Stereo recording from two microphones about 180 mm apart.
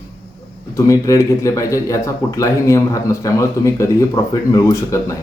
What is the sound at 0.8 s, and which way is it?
Speech, 15° left (ahead or behind).